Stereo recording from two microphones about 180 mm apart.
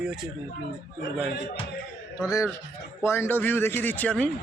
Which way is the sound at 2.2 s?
15° left (ahead or behind).